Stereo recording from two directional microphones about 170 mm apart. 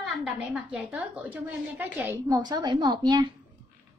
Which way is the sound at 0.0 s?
5° right (ahead or behind).